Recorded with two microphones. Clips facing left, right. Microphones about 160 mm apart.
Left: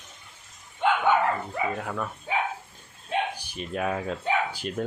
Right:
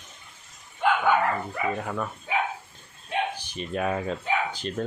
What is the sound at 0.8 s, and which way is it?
Dog, 20° left (ahead or behind).